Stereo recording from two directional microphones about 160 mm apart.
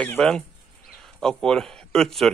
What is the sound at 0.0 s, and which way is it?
Speech, 5° left (ahead or behind).